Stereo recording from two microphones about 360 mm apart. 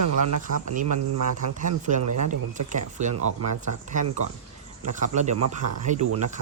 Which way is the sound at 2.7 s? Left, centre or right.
Centre.